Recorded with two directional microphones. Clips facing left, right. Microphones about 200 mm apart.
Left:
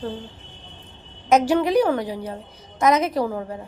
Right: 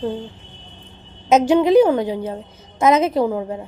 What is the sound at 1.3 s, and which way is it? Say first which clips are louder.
A woman's voice: right 4 dB; 20° right (ahead or behind).